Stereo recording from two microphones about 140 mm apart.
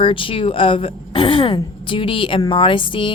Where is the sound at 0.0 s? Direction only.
40° left (ahead or behind).